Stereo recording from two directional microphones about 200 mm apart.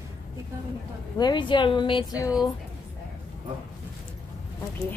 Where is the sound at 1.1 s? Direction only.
20° left (ahead or behind).